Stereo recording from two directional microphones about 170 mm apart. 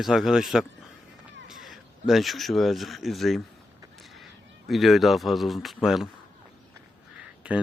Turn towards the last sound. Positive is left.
turn(degrees=-5)  # may be behind; listen again after turning